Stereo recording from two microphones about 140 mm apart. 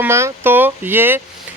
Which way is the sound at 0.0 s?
20° right (ahead or behind).